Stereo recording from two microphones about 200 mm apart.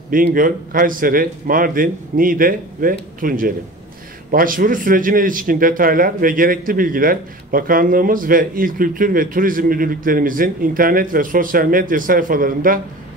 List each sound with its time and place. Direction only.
0.1 s speech: 45° right (ahead or behind)